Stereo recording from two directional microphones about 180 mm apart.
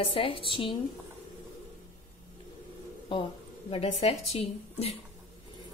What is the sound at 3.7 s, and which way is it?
A woman's voice, 35° left (ahead or behind).